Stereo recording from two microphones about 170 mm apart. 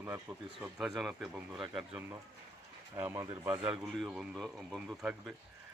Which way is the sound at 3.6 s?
Centre (ahead or behind).